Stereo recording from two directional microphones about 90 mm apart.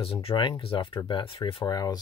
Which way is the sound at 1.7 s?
45° left (ahead or behind).